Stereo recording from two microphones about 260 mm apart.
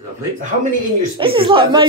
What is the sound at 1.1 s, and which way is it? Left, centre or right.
Speech, centre.